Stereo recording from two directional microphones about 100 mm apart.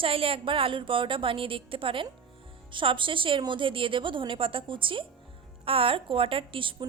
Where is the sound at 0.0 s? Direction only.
65° right (ahead or behind).